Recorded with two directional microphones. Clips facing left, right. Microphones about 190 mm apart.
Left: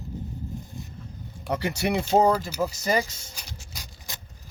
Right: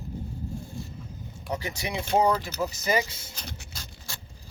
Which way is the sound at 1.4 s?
70° left (ahead or behind).